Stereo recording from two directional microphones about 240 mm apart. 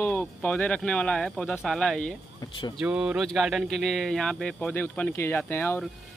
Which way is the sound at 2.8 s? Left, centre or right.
Centre.